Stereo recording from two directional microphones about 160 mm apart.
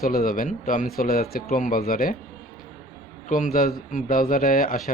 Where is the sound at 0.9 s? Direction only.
65° left (ahead or behind).